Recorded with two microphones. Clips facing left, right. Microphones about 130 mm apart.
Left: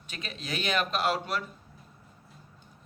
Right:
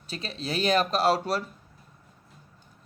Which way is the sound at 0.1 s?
35° right (ahead or behind).